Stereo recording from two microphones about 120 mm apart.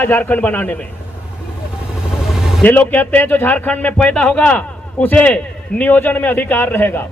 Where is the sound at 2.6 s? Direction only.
15° left (ahead or behind).